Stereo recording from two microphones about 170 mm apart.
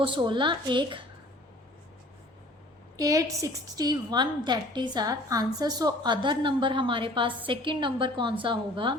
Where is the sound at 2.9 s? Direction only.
20° right (ahead or behind).